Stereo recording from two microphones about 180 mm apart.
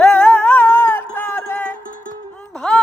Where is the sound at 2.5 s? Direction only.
5° left (ahead or behind).